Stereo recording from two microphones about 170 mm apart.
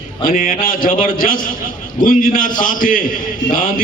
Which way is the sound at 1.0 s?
55° left (ahead or behind).